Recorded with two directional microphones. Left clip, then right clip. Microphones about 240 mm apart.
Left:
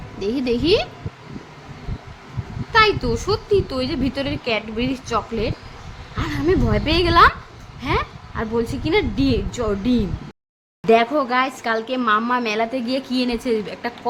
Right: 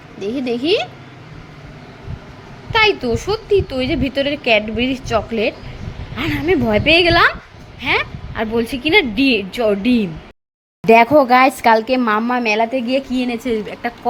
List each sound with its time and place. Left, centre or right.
0.2 s a woman's voice: centre
2.7 s a woman's voice: centre
10.8 s a woman's voice: right
12.7 s a woman's voice: left
13.1 s a woman's voice: centre